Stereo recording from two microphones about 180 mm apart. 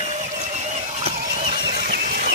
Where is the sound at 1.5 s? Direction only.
60° right (ahead or behind).